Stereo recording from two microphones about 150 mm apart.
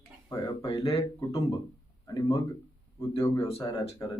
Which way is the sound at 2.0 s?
25° left (ahead or behind).